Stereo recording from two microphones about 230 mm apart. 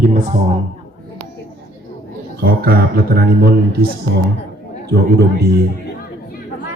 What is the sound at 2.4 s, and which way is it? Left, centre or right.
Speech, right.